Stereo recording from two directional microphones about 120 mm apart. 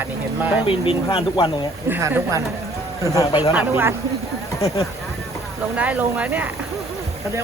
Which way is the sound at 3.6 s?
15° right (ahead or behind).